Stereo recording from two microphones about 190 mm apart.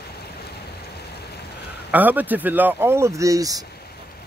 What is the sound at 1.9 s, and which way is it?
Speech, 10° right (ahead or behind).